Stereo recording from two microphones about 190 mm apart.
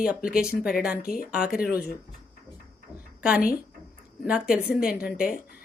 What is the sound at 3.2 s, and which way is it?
A woman's voice, 5° right (ahead or behind).